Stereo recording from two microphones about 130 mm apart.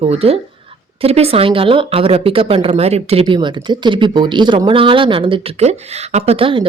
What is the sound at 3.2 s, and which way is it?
A woman's voice, 35° right (ahead or behind).